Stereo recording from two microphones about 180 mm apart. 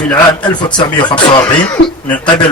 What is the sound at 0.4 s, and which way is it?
Speech, 25° left (ahead or behind).